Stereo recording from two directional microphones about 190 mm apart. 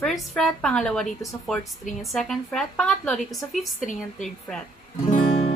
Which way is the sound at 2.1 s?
Centre (ahead or behind).